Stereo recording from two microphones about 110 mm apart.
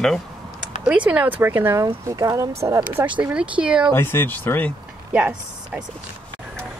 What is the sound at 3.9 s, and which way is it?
Speech, 20° left (ahead or behind).